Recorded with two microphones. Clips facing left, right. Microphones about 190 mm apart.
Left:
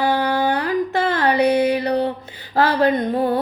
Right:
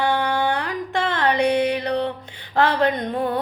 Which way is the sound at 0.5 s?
5° left (ahead or behind).